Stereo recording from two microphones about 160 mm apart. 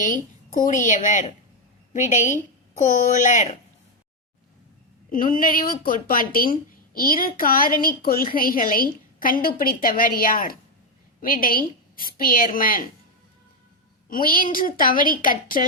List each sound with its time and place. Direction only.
0.0 s a woman's voice: 55° left (ahead or behind)
5.0 s speech: 60° left (ahead or behind)
14.1 s speech: 60° left (ahead or behind)